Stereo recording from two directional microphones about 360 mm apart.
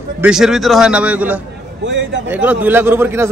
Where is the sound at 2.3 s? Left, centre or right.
Centre.